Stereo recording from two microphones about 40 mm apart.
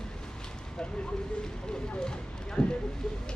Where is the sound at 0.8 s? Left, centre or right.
Left.